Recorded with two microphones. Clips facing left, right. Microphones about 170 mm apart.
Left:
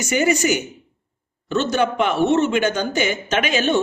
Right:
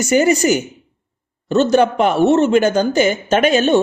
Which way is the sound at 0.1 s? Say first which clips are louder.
Right 5 dB; 40° right (ahead or behind).